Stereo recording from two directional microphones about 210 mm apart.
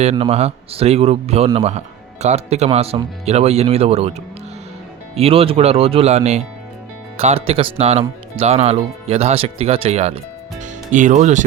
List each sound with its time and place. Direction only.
0.0 s speech: 30° right (ahead or behind)
5.1 s speech: 25° right (ahead or behind)